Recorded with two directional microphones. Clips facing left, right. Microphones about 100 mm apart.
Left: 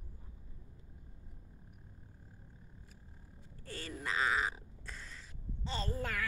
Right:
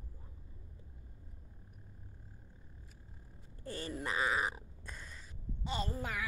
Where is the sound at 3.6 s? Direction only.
20° right (ahead or behind).